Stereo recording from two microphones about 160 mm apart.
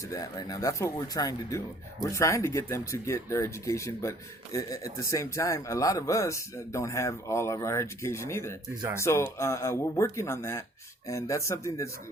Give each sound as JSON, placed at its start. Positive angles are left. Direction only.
{"t": 0.1, "sound": "speech", "side_deg": 20}